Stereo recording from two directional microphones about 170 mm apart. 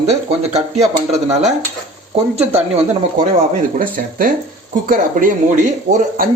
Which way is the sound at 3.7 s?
55° right (ahead or behind).